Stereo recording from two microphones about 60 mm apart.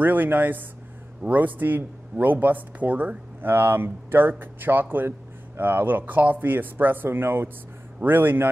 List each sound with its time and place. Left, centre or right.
0.0 s speech: right
3.4 s speech: right